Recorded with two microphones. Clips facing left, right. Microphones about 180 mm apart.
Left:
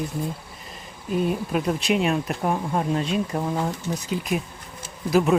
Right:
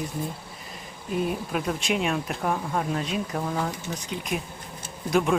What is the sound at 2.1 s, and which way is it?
Speech, 15° left (ahead or behind).